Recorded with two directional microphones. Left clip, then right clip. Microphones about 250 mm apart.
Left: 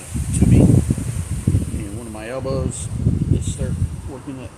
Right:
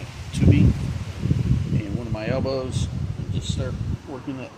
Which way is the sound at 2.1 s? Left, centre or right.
Centre.